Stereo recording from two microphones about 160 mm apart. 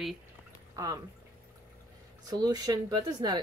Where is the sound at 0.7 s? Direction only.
20° right (ahead or behind).